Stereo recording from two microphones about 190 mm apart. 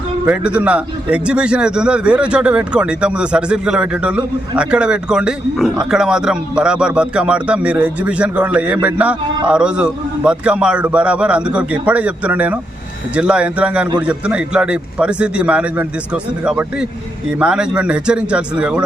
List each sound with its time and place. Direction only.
0.3 s a man's voice: 5° right (ahead or behind)